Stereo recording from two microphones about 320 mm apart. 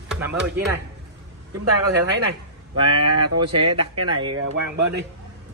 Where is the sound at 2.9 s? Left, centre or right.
Right.